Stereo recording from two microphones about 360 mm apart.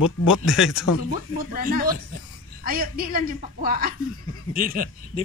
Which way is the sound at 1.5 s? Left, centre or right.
Right.